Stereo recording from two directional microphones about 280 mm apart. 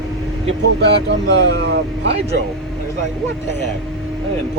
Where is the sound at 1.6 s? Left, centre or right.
Right.